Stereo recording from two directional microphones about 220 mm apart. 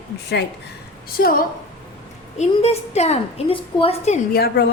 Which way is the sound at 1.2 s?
45° left (ahead or behind).